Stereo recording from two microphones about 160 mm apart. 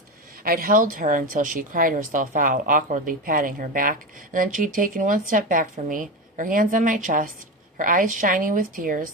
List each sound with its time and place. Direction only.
0.4 s a woman's voice: 65° right (ahead or behind)